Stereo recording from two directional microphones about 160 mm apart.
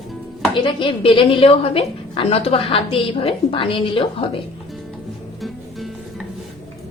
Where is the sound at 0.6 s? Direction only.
30° left (ahead or behind).